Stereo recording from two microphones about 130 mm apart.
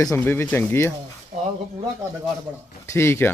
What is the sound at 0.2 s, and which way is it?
Speech, 15° left (ahead or behind).